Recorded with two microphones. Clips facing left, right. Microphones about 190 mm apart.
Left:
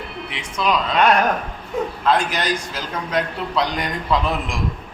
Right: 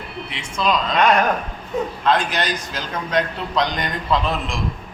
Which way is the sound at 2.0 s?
10° left (ahead or behind).